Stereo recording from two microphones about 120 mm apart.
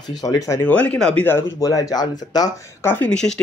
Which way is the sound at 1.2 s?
25° left (ahead or behind).